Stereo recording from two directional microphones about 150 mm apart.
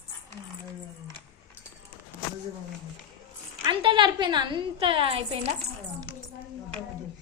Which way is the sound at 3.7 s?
35° right (ahead or behind).